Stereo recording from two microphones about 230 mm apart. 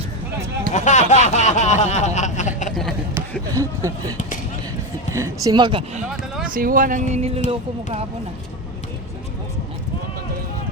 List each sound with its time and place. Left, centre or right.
0.7 s a sound: left
3.5 s speech: centre
5.1 s speech: centre
6.5 s speech: right